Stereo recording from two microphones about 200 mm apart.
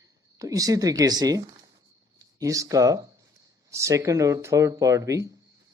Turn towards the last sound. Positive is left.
turn(degrees=-15)  # may be behind; listen again after turning